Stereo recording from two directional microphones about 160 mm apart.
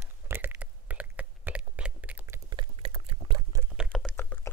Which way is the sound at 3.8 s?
Centre (ahead or behind).